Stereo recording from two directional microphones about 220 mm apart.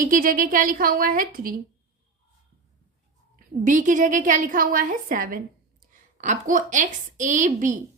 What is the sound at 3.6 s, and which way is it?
A woman's voice, 35° right (ahead or behind).